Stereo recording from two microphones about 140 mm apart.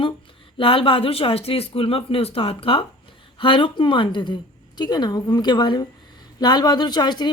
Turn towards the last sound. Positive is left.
turn(degrees=30)  # may be behind; listen again after turning